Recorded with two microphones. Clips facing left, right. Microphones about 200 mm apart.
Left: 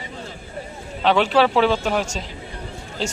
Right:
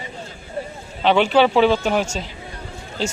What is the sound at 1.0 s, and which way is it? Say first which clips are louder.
Speech: right 2 dB; centre (ahead or behind).